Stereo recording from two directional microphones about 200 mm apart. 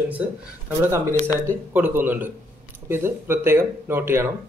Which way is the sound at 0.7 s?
10° right (ahead or behind).